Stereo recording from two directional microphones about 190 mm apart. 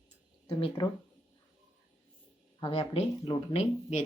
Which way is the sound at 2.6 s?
30° left (ahead or behind).